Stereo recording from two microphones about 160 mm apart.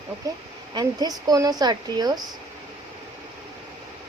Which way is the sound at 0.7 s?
25° right (ahead or behind).